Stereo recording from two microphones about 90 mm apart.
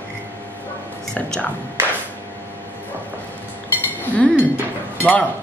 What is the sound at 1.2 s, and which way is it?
Speech, 15° left (ahead or behind).